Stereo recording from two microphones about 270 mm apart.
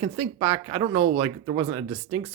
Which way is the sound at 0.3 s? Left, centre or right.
Centre.